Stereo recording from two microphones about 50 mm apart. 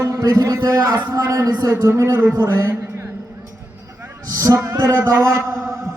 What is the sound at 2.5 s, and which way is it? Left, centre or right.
Speech, right.